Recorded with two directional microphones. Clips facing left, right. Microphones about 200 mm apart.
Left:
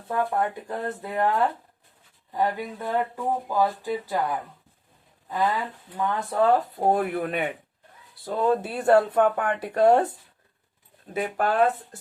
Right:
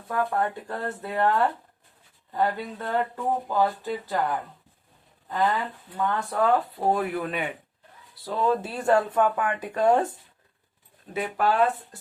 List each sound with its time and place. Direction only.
0.1 s speech: 20° left (ahead or behind)
6.7 s speech: 50° left (ahead or behind)
9.6 s speech: 35° left (ahead or behind)
11.1 s speech: 50° left (ahead or behind)